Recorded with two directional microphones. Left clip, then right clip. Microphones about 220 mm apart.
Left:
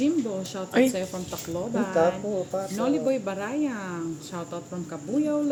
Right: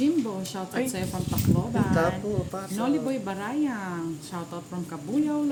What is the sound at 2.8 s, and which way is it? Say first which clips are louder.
Speech: left 2 dB; 20° right (ahead or behind).